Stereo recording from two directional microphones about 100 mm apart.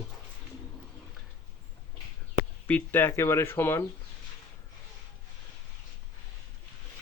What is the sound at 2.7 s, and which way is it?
Speech, 20° left (ahead or behind).